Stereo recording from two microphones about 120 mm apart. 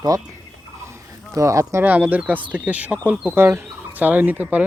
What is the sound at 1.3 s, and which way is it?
Speech, 25° right (ahead or behind).